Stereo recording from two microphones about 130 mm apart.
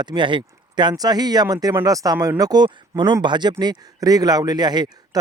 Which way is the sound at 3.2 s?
35° right (ahead or behind).